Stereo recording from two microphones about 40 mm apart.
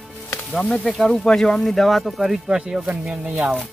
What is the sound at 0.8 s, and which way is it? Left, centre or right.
Speech, centre.